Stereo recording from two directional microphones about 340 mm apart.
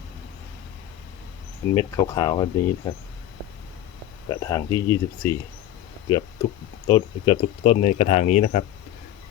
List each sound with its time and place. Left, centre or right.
1.7 s speech: centre
4.3 s speech: centre
6.8 s speech: centre